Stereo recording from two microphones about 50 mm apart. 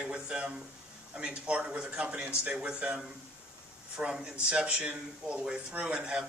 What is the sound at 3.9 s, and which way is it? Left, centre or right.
Speech, right.